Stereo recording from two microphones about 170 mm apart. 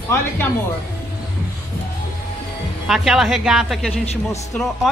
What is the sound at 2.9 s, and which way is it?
A woman's voice, 5° right (ahead or behind).